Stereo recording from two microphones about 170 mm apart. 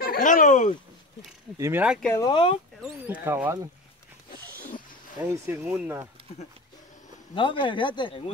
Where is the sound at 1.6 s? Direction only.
10° right (ahead or behind).